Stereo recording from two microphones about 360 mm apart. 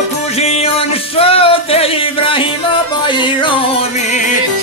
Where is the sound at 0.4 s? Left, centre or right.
Centre.